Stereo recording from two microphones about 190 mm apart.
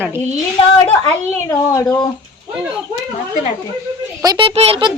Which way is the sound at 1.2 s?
15° left (ahead or behind).